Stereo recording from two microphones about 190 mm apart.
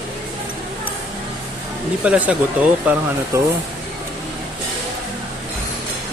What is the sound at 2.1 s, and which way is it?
Speech, 10° right (ahead or behind).